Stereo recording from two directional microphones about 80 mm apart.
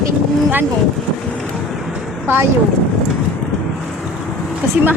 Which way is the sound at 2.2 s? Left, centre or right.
Right.